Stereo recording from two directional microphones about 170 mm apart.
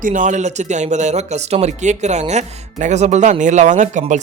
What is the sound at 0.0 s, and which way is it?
Speech, 50° right (ahead or behind).